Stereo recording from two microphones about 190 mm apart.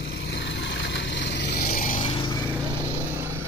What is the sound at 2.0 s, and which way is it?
Vehicle, 25° left (ahead or behind).